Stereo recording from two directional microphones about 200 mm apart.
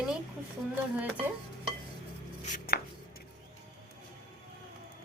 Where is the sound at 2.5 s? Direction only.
50° left (ahead or behind).